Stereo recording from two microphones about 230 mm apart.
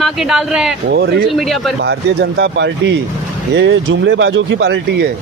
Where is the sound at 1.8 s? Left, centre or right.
Right.